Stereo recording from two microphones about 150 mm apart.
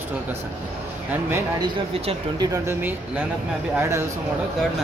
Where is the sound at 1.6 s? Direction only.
30° right (ahead or behind).